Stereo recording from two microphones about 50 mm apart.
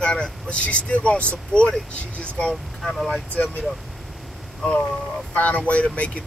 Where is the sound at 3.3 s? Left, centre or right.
Left.